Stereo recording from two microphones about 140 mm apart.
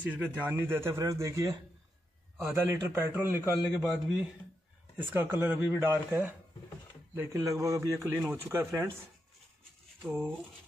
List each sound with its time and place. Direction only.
0.0 s speech: 10° right (ahead or behind)
3.8 s a man's voice: 5° right (ahead or behind)